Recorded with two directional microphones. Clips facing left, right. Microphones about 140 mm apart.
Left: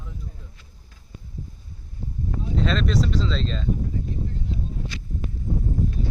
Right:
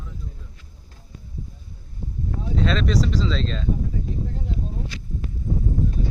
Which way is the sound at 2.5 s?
Centre (ahead or behind).